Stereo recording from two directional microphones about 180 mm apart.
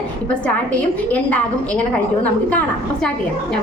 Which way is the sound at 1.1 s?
10° left (ahead or behind).